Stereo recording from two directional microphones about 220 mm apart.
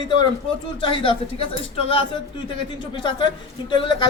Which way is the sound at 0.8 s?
25° left (ahead or behind).